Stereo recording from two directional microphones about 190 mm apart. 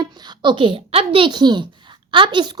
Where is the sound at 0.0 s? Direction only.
20° right (ahead or behind).